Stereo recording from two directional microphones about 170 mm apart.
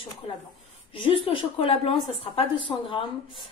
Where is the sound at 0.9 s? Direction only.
30° left (ahead or behind).